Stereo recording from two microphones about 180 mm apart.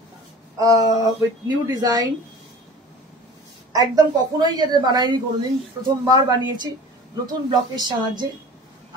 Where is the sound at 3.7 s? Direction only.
20° right (ahead or behind).